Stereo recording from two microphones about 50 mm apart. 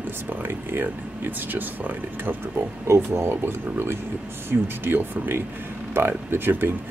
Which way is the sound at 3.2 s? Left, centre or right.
Right.